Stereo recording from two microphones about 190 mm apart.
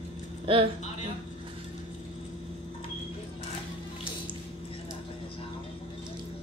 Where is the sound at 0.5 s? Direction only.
25° right (ahead or behind).